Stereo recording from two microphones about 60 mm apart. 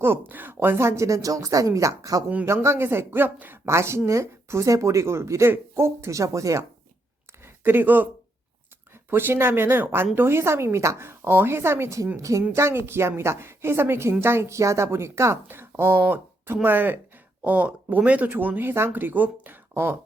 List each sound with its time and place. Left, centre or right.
0.0 s speech: right
2.6 s speech: right
3.7 s a woman's voice: right
7.4 s a sound: right
9.0 s a woman's voice: right
12.1 s speech: right
12.5 s a woman's voice: right
15.4 s speech: right
19.7 s a woman's voice: right